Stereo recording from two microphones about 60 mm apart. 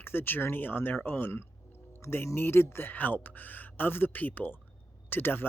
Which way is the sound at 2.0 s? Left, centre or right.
Left.